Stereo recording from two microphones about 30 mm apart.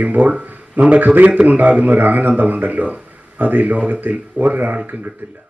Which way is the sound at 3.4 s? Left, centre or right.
Right.